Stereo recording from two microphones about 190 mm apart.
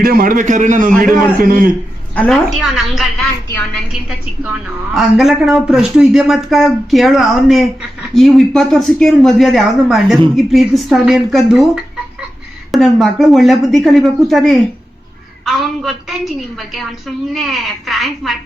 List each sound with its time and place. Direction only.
0.0 s a man's voice: 50° right (ahead or behind)
2.1 s speech: 5° left (ahead or behind)
4.4 s speech: centre (ahead or behind)